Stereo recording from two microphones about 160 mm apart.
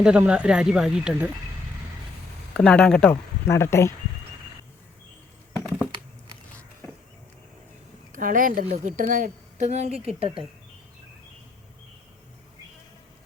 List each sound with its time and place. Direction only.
0.0 s speech: 5° right (ahead or behind)
2.5 s speech: 5° left (ahead or behind)
3.4 s speech: 15° left (ahead or behind)
8.1 s a woman's voice: 60° right (ahead or behind); by 10.4 s 35° right (ahead or behind)